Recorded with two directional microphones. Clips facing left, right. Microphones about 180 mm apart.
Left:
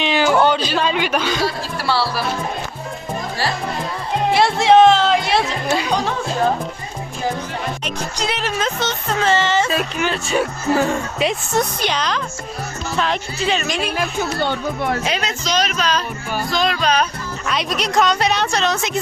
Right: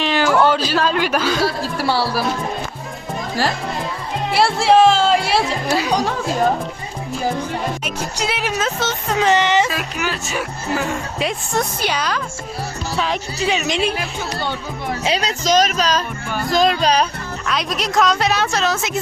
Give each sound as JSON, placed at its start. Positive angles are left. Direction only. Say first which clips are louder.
{"t": 0.0, "sound": "a sound", "louder": "left 1 dB", "side_deg": 0}
{"t": 0.4, "sound": "speech", "louder": "right 1 dB", "side_deg": -5}
{"t": 4.4, "sound": "speech", "louder": "left 1 dB", "side_deg": -5}
{"t": 7.9, "sound": "speech", "louder": "even", "side_deg": -10}
{"t": 9.6, "sound": "speech", "louder": "left 3 dB", "side_deg": 25}
{"t": 11.2, "sound": "speech", "louder": "left 1 dB", "side_deg": 0}
{"t": 13.7, "sound": "speech", "louder": "right 3 dB", "side_deg": -25}
{"t": 14.3, "sound": "speech", "louder": "left 4 dB", "side_deg": 60}
{"t": 15.0, "sound": "music", "louder": "right 3 dB", "side_deg": -35}
{"t": 17.4, "sound": "speech", "louder": "left 1 dB", "side_deg": 0}